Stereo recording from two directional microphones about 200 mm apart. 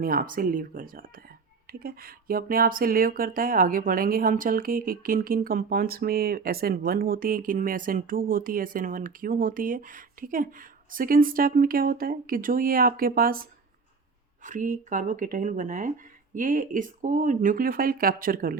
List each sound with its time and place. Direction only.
0.0 s speech: 45° right (ahead or behind)